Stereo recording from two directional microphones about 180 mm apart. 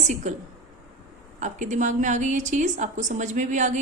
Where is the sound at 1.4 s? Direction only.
45° right (ahead or behind).